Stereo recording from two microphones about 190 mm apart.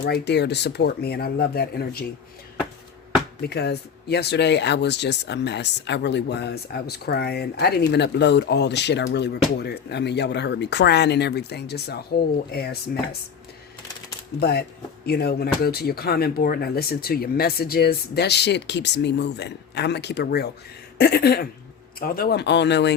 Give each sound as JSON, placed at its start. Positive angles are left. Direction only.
{"t": 0.0, "sound": "speech", "side_deg": 60}
{"t": 3.4, "sound": "speech", "side_deg": 60}
{"t": 14.3, "sound": "speech", "side_deg": 55}